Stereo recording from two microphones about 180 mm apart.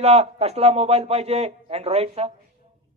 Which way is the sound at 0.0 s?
35° right (ahead or behind).